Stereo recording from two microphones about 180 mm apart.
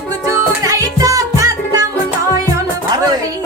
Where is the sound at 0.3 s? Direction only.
20° right (ahead or behind).